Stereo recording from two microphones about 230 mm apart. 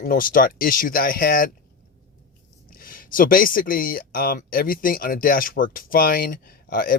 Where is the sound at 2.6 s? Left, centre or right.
Left.